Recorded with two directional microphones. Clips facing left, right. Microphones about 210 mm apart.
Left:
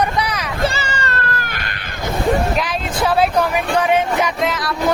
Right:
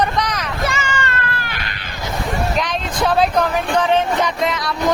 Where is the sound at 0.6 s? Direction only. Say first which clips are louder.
Left 2 dB; 35° left (ahead or behind).